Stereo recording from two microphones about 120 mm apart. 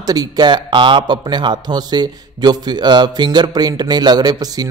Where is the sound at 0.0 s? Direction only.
35° right (ahead or behind).